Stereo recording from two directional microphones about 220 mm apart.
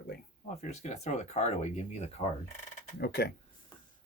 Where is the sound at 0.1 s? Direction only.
35° left (ahead or behind).